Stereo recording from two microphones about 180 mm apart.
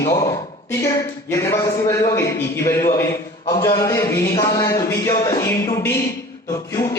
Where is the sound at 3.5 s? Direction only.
15° left (ahead or behind).